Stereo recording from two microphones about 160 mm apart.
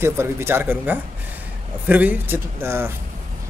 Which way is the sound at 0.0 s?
15° right (ahead or behind).